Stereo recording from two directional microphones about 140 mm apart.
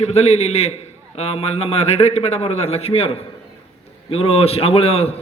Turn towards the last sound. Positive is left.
turn(degrees=45)  # may be behind; listen again after turning